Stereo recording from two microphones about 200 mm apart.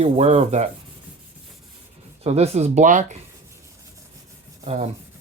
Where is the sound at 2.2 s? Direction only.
30° right (ahead or behind).